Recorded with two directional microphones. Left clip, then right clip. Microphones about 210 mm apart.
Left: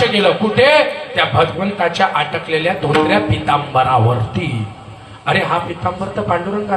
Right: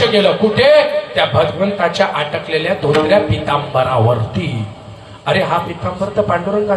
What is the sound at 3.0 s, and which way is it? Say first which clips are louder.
Speech: right 2 dB; 20° left (ahead or behind).